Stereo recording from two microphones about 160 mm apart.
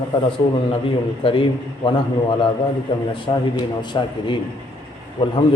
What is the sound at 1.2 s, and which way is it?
Speech, 35° left (ahead or behind).